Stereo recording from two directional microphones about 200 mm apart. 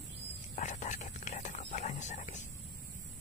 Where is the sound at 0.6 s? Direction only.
35° left (ahead or behind).